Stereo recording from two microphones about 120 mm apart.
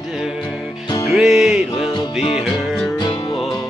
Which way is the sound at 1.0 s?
Centre (ahead or behind).